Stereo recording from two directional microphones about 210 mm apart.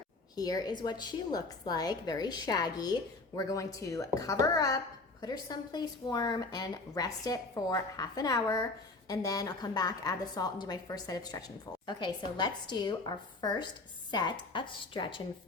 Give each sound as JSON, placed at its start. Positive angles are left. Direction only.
{"t": 0.3, "sound": "a woman's voice", "side_deg": 20}